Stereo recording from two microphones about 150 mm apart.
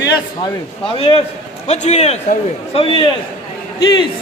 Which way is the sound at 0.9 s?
40° left (ahead or behind).